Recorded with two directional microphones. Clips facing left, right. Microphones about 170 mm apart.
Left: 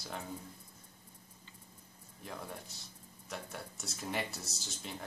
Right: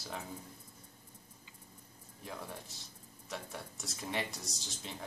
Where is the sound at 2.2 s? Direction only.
Centre (ahead or behind).